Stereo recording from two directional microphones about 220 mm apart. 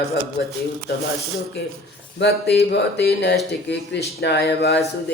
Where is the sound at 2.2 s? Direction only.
50° left (ahead or behind).